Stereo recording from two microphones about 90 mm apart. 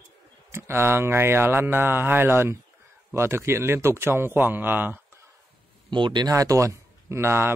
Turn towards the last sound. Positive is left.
turn(degrees=-25)  # may be behind; listen again after turning